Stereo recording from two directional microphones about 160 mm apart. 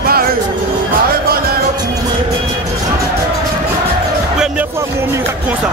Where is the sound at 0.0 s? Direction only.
70° right (ahead or behind).